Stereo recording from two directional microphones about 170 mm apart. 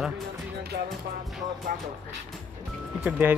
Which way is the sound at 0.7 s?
65° right (ahead or behind).